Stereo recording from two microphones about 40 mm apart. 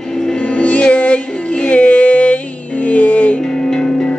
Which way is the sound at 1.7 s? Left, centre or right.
Left.